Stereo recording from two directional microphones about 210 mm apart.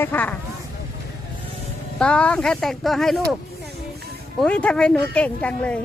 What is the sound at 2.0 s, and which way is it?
Speech, 5° left (ahead or behind).